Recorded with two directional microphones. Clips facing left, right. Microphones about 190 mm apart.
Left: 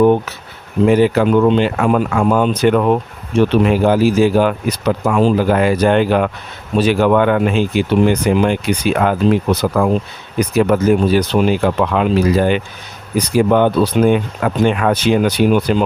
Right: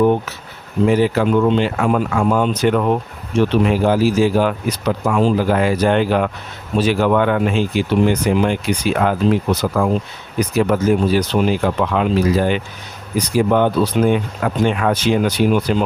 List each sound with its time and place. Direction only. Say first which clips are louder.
0.9 s speech: left 3 dB; 60° left (ahead or behind)